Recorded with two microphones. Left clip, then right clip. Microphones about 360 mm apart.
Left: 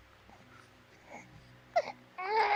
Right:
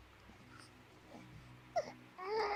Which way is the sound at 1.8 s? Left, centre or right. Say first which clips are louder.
Left 8 dB; left.